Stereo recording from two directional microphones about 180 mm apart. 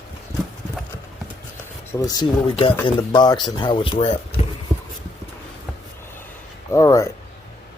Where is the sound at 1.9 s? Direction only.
20° left (ahead or behind).